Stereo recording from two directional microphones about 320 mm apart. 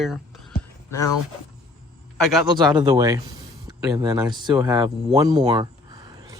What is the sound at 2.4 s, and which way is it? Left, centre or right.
Speech, centre.